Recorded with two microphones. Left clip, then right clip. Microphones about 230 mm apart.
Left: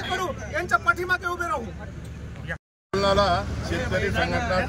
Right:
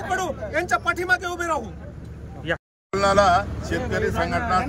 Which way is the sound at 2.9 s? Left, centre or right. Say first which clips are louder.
Right 4 dB; centre.